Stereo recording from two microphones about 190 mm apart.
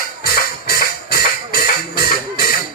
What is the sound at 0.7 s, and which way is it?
Music, 50° left (ahead or behind).